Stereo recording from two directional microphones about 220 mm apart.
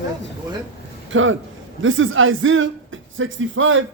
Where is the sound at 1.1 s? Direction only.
60° right (ahead or behind).